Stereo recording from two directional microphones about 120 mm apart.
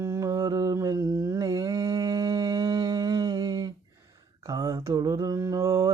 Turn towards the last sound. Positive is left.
turn(degrees=-30)  # may be behind; listen again after turning